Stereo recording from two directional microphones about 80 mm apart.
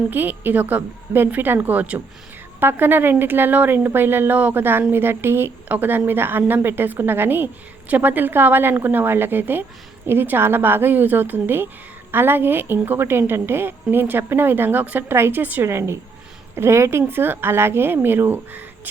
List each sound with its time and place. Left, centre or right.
0.1 s a woman's voice: right